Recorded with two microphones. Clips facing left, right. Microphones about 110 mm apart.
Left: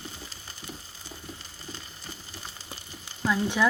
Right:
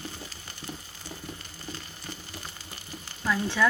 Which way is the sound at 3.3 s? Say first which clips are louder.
Left 1 dB; 15° left (ahead or behind).